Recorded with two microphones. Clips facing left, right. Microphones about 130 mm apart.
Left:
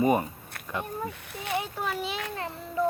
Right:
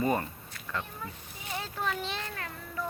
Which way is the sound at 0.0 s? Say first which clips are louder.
Left 5 dB; 15° left (ahead or behind).